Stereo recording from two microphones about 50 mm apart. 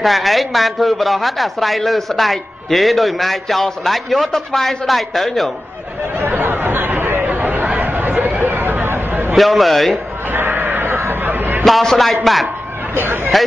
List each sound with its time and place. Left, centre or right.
0.0 s speech: centre
6.1 s chatter: right
7.2 s a sound: right
7.8 s chatter: right
9.3 s speech: centre
10.3 s a sound: right
11.6 s speech: centre
12.9 s hubbub: right